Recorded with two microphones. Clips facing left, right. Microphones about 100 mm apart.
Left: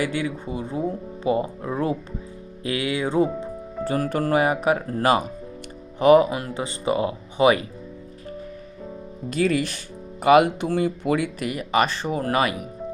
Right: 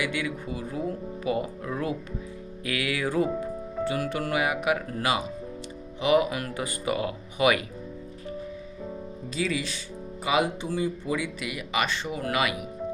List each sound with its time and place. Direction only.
0.0 s speech: 30° left (ahead or behind)
3.8 s speech: 40° left (ahead or behind)
9.3 s speech: 55° left (ahead or behind); by 12.6 s 40° left (ahead or behind)